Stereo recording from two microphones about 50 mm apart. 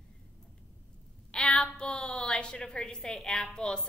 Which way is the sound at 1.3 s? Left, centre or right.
Centre.